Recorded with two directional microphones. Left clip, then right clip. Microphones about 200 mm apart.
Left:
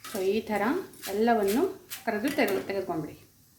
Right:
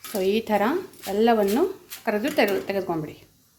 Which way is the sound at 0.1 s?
35° right (ahead or behind).